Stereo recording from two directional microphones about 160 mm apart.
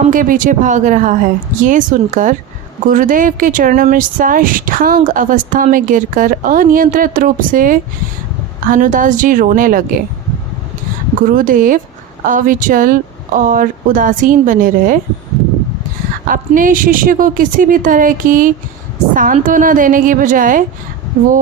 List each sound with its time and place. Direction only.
0.1 s a woman's voice: 55° right (ahead or behind)
11.3 s speech: 60° right (ahead or behind)
16.2 s speech: 55° right (ahead or behind)